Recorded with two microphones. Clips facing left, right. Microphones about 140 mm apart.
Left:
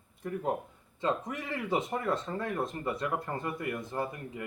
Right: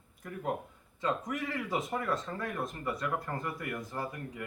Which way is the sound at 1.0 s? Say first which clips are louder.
Left 1 dB; 25° left (ahead or behind).